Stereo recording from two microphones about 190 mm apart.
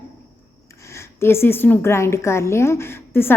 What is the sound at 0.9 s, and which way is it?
A woman's voice, 15° left (ahead or behind).